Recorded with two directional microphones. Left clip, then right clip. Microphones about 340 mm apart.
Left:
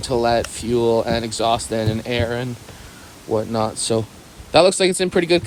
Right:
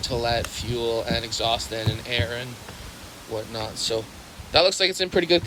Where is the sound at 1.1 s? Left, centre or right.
Centre.